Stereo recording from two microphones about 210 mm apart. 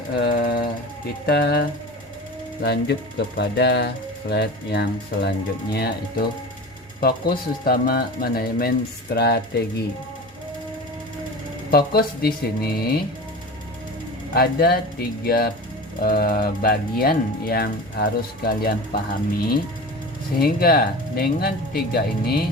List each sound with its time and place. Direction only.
0.2 s jackhammer: 50° left (ahead or behind)
1.3 s speech: 50° left (ahead or behind)
2.6 s speech: 55° left (ahead or behind)
11.7 s speech: 45° left (ahead or behind)
14.3 s speech: 45° left (ahead or behind)
20.4 s speech: 45° left (ahead or behind)